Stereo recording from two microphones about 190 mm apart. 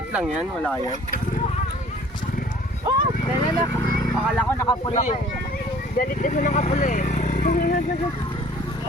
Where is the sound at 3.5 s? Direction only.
20° left (ahead or behind).